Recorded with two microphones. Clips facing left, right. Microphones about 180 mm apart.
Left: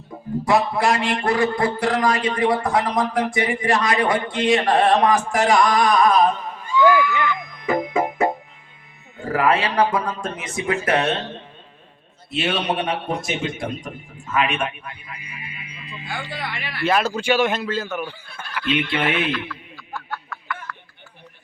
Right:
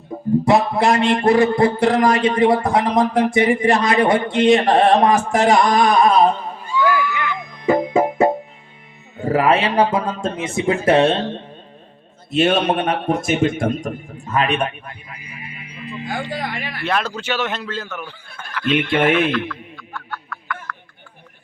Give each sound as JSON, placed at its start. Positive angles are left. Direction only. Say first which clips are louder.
{"t": 0.4, "sound": "speech", "louder": "right 2 dB", "side_deg": -25}
{"t": 7.6, "sound": "music", "louder": "right 5 dB", "side_deg": -30}
{"t": 9.3, "sound": "speech", "louder": "right 3 dB", "side_deg": -25}
{"t": 12.3, "sound": "a man's voice", "louder": "right 7 dB", "side_deg": -45}
{"t": 14.3, "sound": "a man's voice", "louder": "right 3 dB", "side_deg": -35}
{"t": 15.4, "sound": "music", "louder": "right 10 dB", "side_deg": -45}
{"t": 16.8, "sound": "speech", "louder": "left 3 dB", "side_deg": 5}
{"t": 18.6, "sound": "a man's voice", "louder": "right 5 dB", "side_deg": -50}
{"t": 19.3, "sound": "a sound", "louder": "right 5 dB", "side_deg": 5}